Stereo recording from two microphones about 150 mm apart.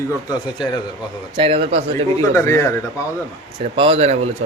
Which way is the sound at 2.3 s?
20° left (ahead or behind).